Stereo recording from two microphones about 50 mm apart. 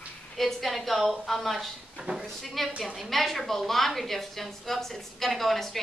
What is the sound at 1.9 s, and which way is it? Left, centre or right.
Speech, centre.